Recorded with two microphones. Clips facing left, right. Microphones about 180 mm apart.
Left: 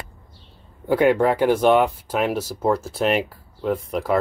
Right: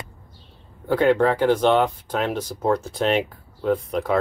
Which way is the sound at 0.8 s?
10° left (ahead or behind).